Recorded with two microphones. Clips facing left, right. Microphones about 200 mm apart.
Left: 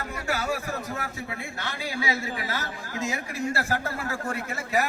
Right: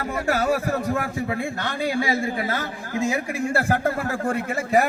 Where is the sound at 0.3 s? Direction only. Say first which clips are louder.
Right 7 dB; 50° right (ahead or behind).